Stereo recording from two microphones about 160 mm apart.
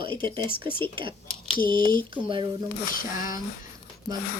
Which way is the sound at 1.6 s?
30° right (ahead or behind).